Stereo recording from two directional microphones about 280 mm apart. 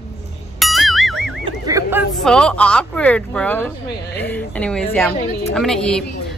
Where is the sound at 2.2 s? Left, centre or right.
Centre.